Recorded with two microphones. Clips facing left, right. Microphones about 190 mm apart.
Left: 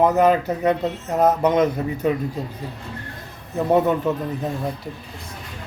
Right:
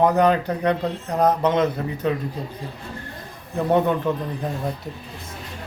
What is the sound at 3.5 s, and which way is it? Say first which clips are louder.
Speech: left 1 dB; 5° left (ahead or behind).